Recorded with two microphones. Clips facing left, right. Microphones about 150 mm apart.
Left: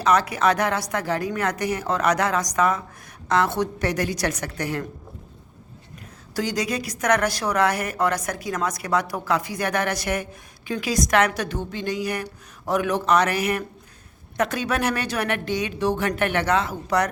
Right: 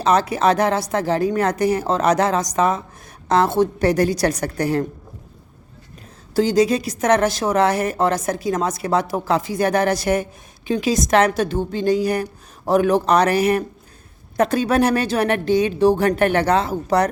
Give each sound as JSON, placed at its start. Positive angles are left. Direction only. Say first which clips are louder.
{"t": 0.0, "sound": "a woman's voice", "louder": "right 3 dB", "side_deg": -30}
{"t": 6.3, "sound": "a woman's voice", "louder": "right 9 dB", "side_deg": -30}